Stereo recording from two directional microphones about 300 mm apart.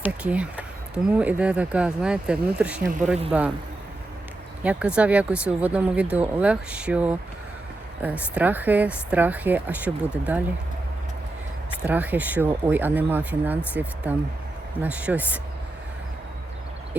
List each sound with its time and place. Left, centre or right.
0.0 s speech: centre
4.6 s speech: centre
11.9 s speech: centre